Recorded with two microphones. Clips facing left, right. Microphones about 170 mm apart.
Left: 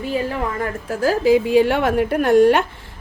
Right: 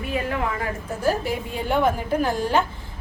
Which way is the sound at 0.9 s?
90° left.